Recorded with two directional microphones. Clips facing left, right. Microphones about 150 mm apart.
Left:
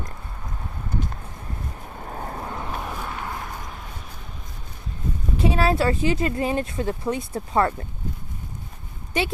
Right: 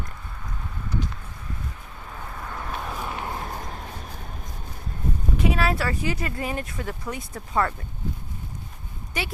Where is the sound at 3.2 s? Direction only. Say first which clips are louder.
Right 1 dB; 40° right (ahead or behind).